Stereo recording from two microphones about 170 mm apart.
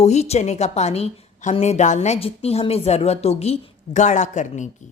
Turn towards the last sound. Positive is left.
turn(degrees=45)  # may be behind; listen again after turning